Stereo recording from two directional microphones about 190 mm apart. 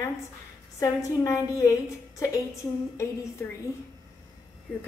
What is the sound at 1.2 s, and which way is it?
Speech, 15° left (ahead or behind).